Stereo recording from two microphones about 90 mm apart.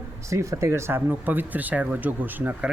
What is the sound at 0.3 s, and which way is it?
Speech, 30° right (ahead or behind).